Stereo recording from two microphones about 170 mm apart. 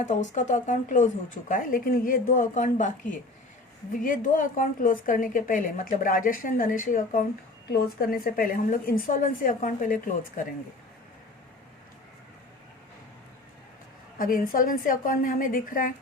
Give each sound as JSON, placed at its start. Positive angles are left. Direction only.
{"t": 0.0, "sound": "a woman's voice", "side_deg": 45}
{"t": 4.0, "sound": "a woman's voice", "side_deg": 50}
{"t": 14.2, "sound": "a woman's voice", "side_deg": 55}